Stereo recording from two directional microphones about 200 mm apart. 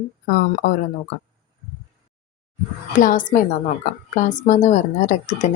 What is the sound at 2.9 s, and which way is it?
Speech, 40° left (ahead or behind).